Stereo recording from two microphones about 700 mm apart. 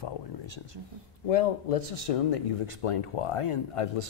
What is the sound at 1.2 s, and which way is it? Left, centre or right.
Speech, left.